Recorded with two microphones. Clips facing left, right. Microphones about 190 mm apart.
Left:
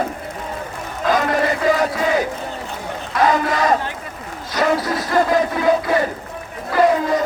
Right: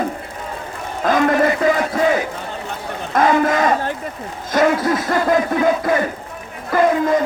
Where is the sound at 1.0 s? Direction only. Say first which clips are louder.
Right 3 dB; 50° right (ahead or behind).